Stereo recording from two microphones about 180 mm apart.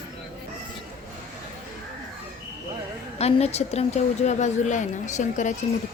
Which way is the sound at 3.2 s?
35° left (ahead or behind).